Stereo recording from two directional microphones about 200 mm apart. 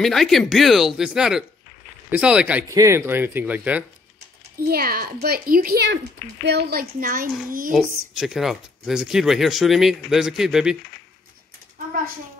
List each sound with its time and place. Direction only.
0.0 s speech: centre (ahead or behind)
4.6 s a child's voice: 50° right (ahead or behind)
7.9 s speech: centre (ahead or behind)